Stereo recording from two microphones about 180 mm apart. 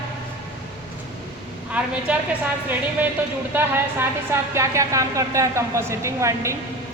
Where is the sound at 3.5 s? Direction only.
15° right (ahead or behind).